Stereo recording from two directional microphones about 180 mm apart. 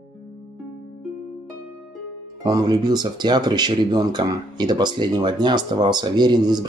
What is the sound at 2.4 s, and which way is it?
Speech, 20° right (ahead or behind).